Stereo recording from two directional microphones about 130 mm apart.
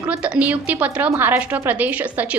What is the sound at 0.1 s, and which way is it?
A woman's voice, 10° right (ahead or behind).